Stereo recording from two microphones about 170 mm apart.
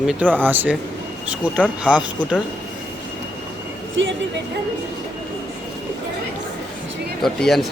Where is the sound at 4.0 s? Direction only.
90° right.